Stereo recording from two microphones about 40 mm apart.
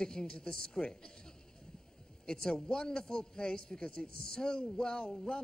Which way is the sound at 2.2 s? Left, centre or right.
Centre.